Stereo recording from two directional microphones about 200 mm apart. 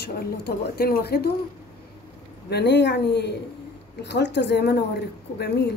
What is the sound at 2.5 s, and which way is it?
A woman's voice, 60° left (ahead or behind).